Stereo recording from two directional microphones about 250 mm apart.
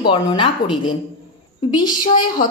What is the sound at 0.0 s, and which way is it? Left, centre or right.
A woman's voice, centre.